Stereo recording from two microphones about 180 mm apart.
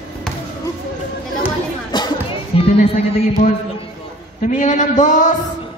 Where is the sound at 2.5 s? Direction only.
30° left (ahead or behind).